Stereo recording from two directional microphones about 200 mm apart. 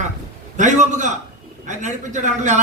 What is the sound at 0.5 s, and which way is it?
A man's voice, 40° right (ahead or behind).